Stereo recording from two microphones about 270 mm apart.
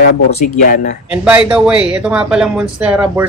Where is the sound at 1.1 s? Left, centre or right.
Centre.